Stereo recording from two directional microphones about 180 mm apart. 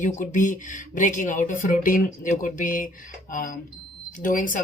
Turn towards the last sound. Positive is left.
turn(degrees=50)  # may be behind; listen again after turning